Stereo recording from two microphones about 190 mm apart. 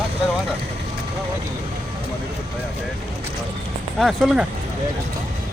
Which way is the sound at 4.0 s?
Centre (ahead or behind).